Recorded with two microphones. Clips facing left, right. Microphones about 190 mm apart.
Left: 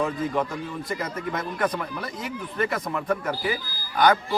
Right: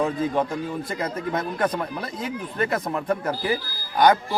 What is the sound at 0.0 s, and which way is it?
Speech, 25° right (ahead or behind).